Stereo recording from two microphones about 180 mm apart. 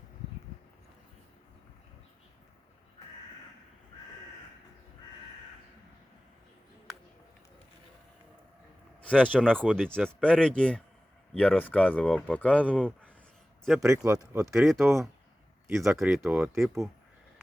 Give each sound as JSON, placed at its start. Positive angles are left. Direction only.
{"t": 9.0, "sound": "speech", "side_deg": 5}
{"t": 13.8, "sound": "speech", "side_deg": -15}
{"t": 14.4, "sound": "speech", "side_deg": 0}